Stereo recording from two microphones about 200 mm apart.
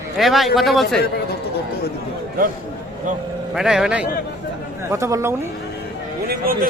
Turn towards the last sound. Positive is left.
turn(degrees=-45)  # may be behind; listen again after turning